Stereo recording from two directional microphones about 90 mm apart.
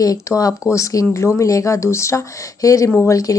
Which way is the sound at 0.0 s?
40° left (ahead or behind).